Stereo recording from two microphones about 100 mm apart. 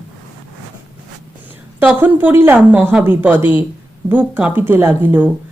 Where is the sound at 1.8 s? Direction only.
15° right (ahead or behind).